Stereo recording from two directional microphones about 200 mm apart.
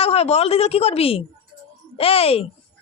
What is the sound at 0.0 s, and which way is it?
A woman's voice, 30° left (ahead or behind).